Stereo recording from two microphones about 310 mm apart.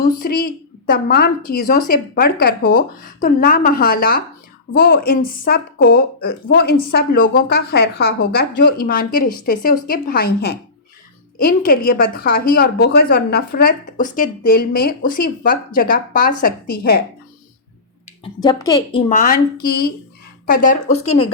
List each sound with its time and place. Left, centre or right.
0.0 s a woman's voice: left
18.2 s a woman's voice: centre